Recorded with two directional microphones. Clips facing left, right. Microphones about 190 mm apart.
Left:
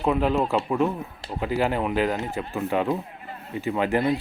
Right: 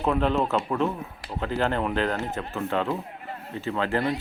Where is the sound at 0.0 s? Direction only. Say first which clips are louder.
Left 1 dB; 5° left (ahead or behind).